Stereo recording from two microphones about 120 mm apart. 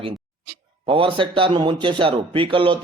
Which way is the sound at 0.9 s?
45° right (ahead or behind).